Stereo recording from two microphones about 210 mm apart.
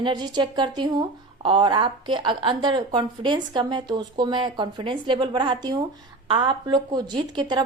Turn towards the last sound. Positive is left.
turn(degrees=-20)  # may be behind; listen again after turning